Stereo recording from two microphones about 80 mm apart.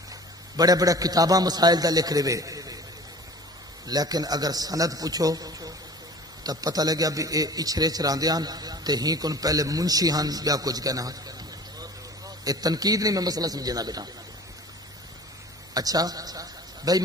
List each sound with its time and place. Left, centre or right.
0.1 s a man's voice: right
3.8 s a man's voice: right
15.7 s a man's voice: right